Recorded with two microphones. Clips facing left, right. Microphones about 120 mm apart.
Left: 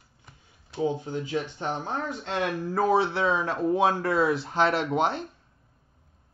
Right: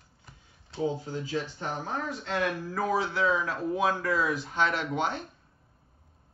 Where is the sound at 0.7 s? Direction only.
15° left (ahead or behind).